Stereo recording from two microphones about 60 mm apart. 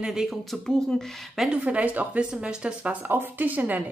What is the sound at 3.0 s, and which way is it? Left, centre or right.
Speech, right.